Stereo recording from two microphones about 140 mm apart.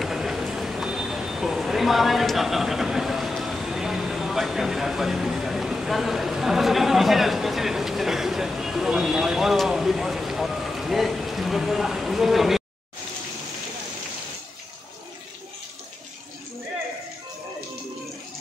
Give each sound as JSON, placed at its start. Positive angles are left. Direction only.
{"t": 0.0, "sound": "speech", "side_deg": -5}